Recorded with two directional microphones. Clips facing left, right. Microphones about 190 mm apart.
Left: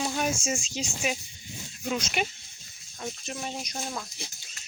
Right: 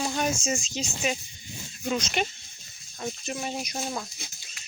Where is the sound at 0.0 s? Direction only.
5° left (ahead or behind).